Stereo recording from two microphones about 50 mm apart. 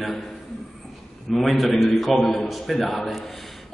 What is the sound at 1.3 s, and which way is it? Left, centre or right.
A man's voice, centre.